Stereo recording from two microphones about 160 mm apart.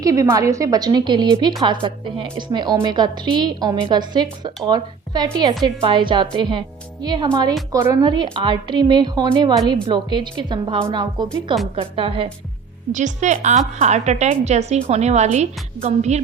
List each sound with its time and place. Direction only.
0.0 s a woman's voice: 20° right (ahead or behind)
12.9 s a woman's voice: 50° right (ahead or behind)